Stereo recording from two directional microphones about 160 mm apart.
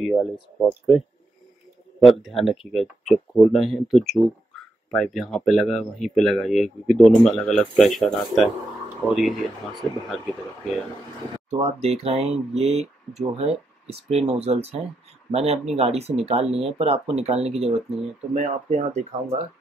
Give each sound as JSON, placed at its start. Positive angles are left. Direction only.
{"t": 0.0, "sound": "speech", "side_deg": 5}
{"t": 2.0, "sound": "speech", "side_deg": 0}
{"t": 11.5, "sound": "speech", "side_deg": -40}